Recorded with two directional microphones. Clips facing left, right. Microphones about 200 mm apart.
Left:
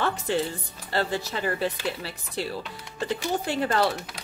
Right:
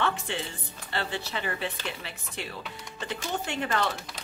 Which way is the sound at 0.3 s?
40° left (ahead or behind).